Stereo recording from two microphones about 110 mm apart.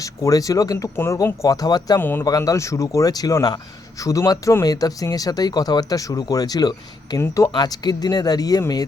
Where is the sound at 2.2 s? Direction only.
30° left (ahead or behind).